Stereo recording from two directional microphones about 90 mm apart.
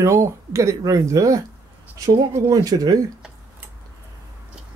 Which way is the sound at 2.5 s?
45° right (ahead or behind).